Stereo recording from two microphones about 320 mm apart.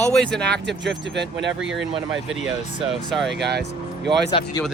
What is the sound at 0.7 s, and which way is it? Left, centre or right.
Speech, right.